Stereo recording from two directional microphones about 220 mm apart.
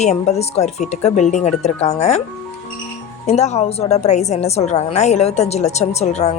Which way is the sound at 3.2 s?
30° left (ahead or behind).